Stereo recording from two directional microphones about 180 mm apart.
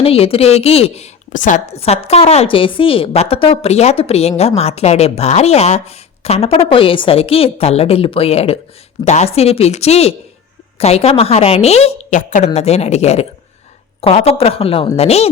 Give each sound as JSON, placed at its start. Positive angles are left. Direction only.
{"t": 0.0, "sound": "a woman's voice", "side_deg": 30}